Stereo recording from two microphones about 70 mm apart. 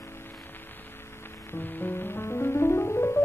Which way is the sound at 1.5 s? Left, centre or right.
Left.